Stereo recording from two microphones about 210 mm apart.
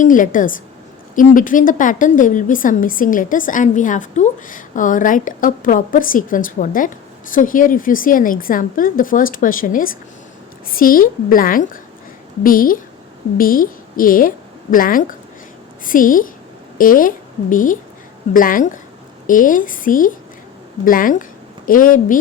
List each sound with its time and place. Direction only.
0.0 s a woman's voice: 40° left (ahead or behind)